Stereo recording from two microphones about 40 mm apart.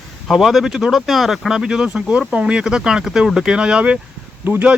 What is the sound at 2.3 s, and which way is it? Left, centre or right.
Speech, right.